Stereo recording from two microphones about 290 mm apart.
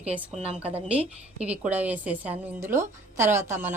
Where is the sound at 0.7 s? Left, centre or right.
Centre.